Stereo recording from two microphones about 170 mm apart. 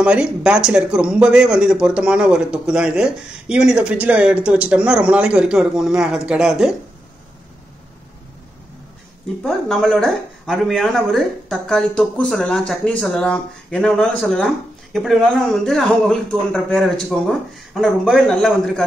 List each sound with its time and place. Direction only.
0.0 s speech: 5° right (ahead or behind)
9.4 s speech: centre (ahead or behind)